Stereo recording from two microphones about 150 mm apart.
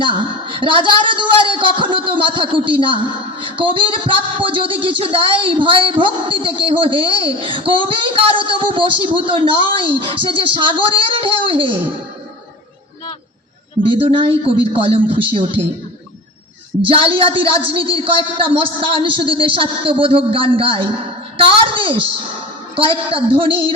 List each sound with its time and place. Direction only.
0.0 s speech: 35° right (ahead or behind)
14.0 s speech: 35° right (ahead or behind)
16.9 s speech: 40° right (ahead or behind)